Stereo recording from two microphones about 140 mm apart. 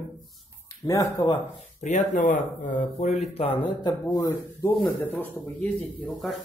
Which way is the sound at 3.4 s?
40° left (ahead or behind).